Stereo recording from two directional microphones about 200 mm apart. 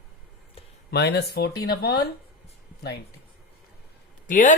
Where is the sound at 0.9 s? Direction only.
55° left (ahead or behind).